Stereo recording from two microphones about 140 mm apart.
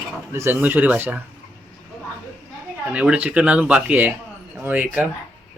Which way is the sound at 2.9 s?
10° right (ahead or behind).